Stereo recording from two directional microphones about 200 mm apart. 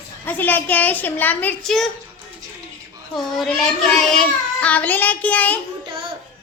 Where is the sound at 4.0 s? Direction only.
5° left (ahead or behind).